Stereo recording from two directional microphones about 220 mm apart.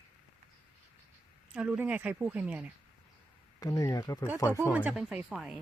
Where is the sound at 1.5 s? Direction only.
5° right (ahead or behind).